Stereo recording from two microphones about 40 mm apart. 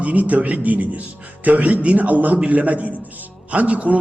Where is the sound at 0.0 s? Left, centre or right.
Right.